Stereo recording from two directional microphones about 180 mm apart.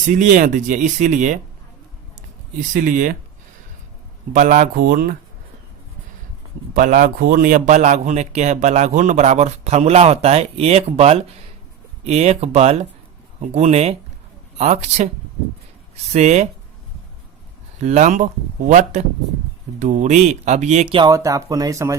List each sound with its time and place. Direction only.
0.1 s speech: 45° right (ahead or behind)
2.7 s speech: 45° right (ahead or behind)
4.3 s speech: 45° right (ahead or behind)
6.7 s a man's voice: 50° right (ahead or behind)
16.1 s a man's voice: 40° right (ahead or behind)
17.8 s a man's voice: 40° right (ahead or behind)
20.9 s speech: 25° right (ahead or behind)